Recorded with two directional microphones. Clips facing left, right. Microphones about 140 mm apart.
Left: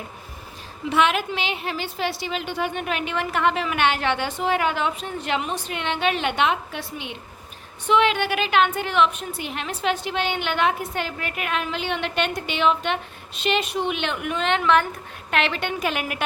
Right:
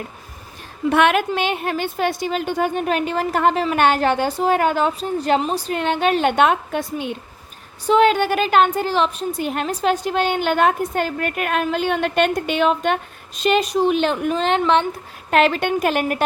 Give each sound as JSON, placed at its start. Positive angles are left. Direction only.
{"t": 0.9, "sound": "a woman's voice", "side_deg": -55}